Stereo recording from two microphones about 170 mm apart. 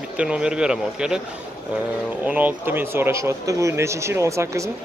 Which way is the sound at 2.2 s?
10° right (ahead or behind).